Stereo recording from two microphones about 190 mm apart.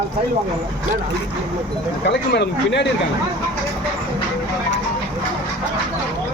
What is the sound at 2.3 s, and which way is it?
Speech, 65° left (ahead or behind).